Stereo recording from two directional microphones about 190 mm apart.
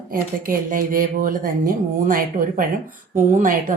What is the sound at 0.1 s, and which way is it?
A woman's voice, 50° right (ahead or behind).